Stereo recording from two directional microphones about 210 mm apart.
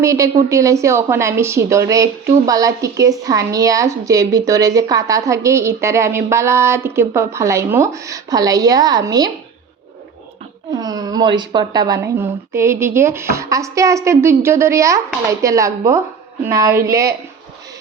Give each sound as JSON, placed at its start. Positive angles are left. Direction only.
{"t": 0.0, "sound": "speech", "side_deg": -15}
{"t": 10.7, "sound": "speech", "side_deg": -20}